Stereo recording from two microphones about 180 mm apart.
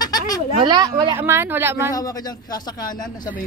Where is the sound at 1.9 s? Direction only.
20° left (ahead or behind).